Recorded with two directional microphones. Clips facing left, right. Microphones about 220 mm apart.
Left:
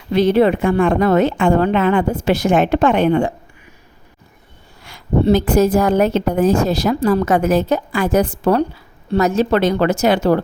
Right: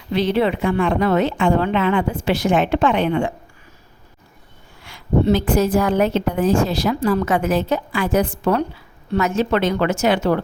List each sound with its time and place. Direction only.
0.1 s a woman's voice: 45° left (ahead or behind)
4.8 s a woman's voice: 40° left (ahead or behind)